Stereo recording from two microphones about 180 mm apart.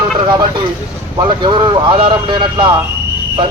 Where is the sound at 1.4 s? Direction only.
25° right (ahead or behind).